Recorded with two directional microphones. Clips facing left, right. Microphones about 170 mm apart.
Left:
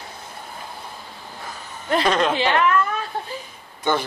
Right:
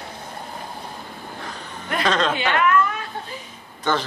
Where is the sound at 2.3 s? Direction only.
30° left (ahead or behind).